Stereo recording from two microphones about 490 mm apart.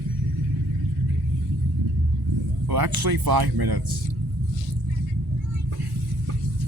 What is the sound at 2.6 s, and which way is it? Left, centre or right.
Speech, right.